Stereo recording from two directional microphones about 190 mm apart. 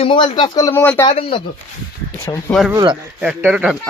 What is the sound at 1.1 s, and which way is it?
Speech, 30° left (ahead or behind).